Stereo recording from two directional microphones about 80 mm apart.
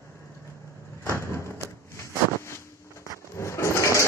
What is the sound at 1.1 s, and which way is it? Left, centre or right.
Thump, left.